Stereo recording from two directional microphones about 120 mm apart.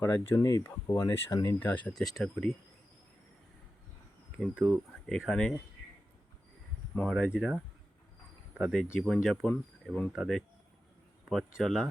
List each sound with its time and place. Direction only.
0.0 s speech: 20° left (ahead or behind)
1.5 s speech: 15° left (ahead or behind)
1.9 s speech: 5° left (ahead or behind)
4.4 s speech: 5° right (ahead or behind)
5.2 s speech: 5° left (ahead or behind)
6.9 s speech: 5° left (ahead or behind)
7.3 s speech: 10° right (ahead or behind)
8.7 s speech: 5° left (ahead or behind)